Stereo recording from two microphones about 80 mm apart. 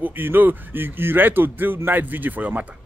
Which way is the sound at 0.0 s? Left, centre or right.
Right.